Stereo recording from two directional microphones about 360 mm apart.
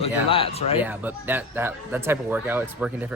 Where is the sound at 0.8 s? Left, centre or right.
Centre.